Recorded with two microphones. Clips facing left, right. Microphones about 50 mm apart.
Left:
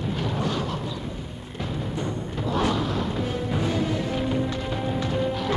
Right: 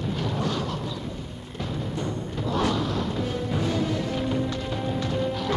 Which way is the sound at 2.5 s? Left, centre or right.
Centre.